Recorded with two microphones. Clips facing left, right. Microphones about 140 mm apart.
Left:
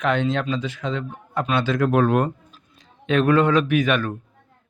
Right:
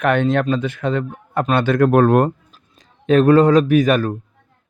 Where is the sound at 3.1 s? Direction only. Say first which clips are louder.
Right 6 dB; 40° right (ahead or behind).